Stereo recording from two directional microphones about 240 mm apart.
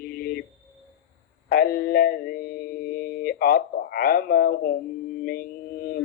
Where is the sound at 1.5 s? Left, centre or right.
Left.